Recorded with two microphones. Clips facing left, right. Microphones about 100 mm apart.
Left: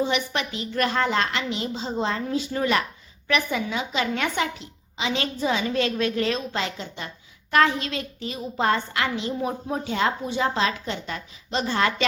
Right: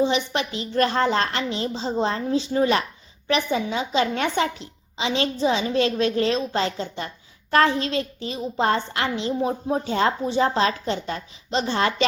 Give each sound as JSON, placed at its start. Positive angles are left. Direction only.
{"t": 0.0, "sound": "a woman's voice", "side_deg": -25}